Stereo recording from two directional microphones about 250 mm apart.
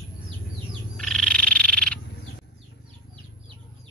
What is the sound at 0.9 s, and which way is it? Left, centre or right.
Frog, centre.